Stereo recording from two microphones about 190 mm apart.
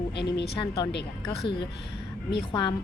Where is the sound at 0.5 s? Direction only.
20° left (ahead or behind).